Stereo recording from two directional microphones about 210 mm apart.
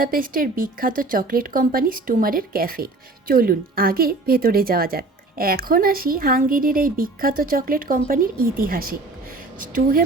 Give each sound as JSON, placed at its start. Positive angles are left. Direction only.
{"t": 0.0, "sound": "speech", "side_deg": -40}